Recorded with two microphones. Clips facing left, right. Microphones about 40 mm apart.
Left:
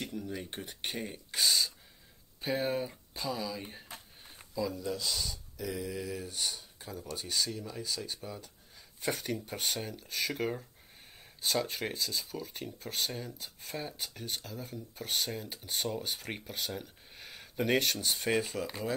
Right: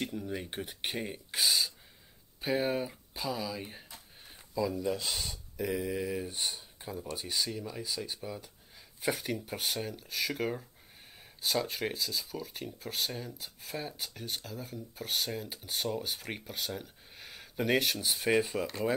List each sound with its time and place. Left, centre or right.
0.0 s speech: centre
4.8 s speech: right
7.2 s speech: centre